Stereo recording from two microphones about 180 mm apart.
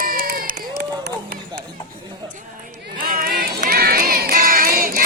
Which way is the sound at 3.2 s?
60° right (ahead or behind).